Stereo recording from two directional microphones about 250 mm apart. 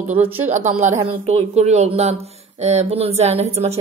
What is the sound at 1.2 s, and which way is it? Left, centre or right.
A woman's voice, right.